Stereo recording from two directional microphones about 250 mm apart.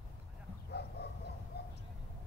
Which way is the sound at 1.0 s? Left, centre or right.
Left.